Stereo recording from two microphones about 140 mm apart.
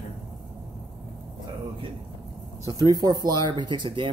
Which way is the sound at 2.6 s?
25° right (ahead or behind).